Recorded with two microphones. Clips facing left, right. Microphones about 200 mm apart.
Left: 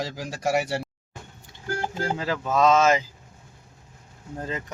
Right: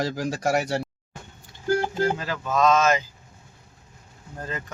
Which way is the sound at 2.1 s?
25° left (ahead or behind).